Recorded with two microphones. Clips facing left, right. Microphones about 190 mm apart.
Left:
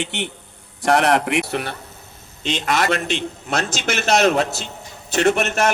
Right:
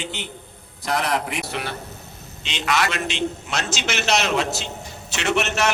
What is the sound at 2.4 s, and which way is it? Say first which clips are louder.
A man's voice: left 4 dB; 50° left (ahead or behind).